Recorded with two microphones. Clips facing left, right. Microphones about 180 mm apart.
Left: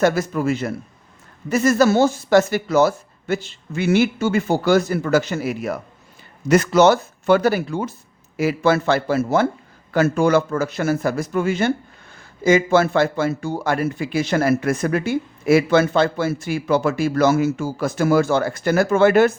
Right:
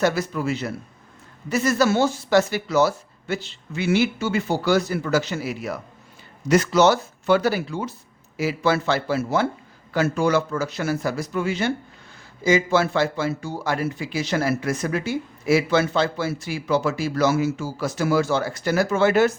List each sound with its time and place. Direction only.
0.0 s a man's voice: 50° left (ahead or behind)